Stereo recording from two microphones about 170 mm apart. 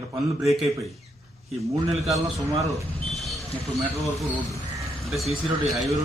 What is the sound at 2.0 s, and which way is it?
A man's voice, centre (ahead or behind).